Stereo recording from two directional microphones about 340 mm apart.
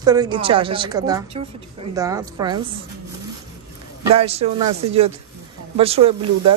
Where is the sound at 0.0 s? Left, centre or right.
Centre.